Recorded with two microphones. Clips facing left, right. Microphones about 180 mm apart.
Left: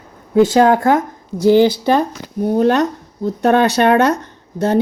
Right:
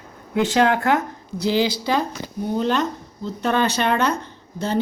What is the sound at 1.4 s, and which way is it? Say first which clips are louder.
Speech: left 9 dB; 50° left (ahead or behind).